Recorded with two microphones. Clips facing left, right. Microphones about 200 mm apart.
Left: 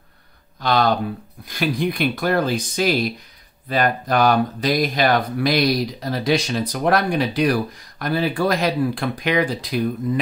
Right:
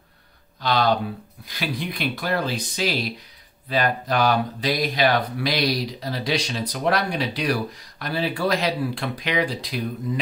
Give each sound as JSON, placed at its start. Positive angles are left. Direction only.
{"t": 0.6, "sound": "speech", "side_deg": 50}